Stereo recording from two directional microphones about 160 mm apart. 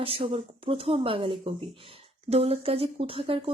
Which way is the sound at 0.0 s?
35° right (ahead or behind).